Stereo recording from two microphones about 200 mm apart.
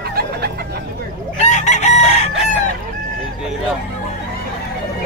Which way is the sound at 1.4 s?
35° left (ahead or behind).